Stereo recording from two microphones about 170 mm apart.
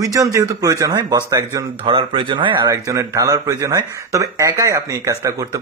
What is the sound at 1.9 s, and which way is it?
Speech, 30° right (ahead or behind).